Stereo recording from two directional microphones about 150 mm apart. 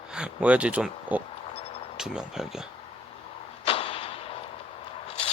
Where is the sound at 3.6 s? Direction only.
40° left (ahead or behind).